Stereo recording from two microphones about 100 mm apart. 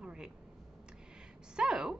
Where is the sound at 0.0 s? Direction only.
10° right (ahead or behind).